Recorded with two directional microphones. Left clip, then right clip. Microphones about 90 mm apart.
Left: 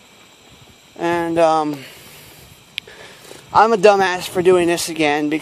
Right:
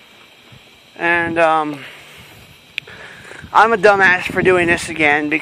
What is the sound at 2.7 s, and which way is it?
A man's voice, 55° left (ahead or behind).